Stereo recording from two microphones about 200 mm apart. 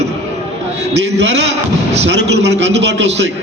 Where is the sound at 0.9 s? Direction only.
60° right (ahead or behind).